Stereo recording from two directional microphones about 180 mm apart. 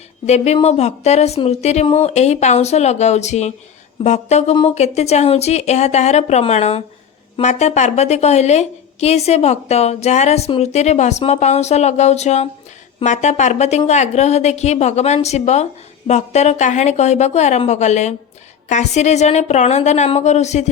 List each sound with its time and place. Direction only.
0.3 s a woman's voice: 35° left (ahead or behind)